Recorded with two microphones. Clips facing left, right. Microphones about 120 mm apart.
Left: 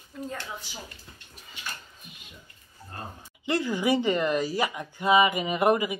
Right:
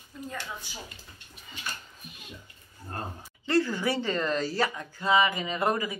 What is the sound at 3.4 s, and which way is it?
Speech, 15° left (ahead or behind).